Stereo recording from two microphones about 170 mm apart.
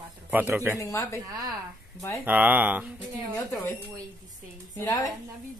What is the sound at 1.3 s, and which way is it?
Speech, 20° right (ahead or behind).